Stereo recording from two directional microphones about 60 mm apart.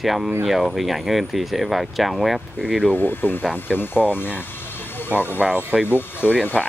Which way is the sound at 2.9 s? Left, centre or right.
Left.